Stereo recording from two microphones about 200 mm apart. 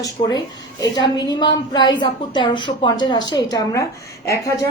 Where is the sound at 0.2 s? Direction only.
30° left (ahead or behind).